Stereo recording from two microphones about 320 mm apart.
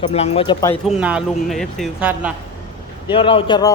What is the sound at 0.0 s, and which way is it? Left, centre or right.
Speech, centre.